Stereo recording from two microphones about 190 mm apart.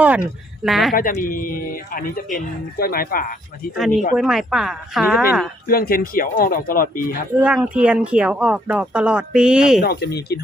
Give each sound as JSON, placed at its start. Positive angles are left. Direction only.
{"t": 0.6, "sound": "speech", "side_deg": 0}
{"t": 0.9, "sound": "a man's voice", "side_deg": 45}
{"t": 3.8, "sound": "speech", "side_deg": 0}
{"t": 5.6, "sound": "a man's voice", "side_deg": 50}
{"t": 7.3, "sound": "speech", "side_deg": -10}
{"t": 9.8, "sound": "speech", "side_deg": 55}